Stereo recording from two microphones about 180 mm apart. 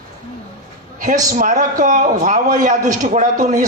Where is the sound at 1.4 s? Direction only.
45° right (ahead or behind).